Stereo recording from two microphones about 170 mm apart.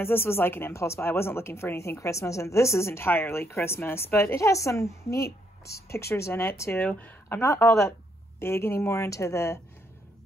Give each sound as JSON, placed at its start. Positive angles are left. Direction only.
{"t": 0.0, "sound": "speech", "side_deg": 15}